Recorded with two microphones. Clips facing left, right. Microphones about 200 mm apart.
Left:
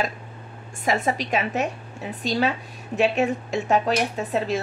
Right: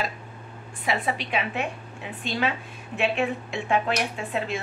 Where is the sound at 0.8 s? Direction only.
45° left (ahead or behind).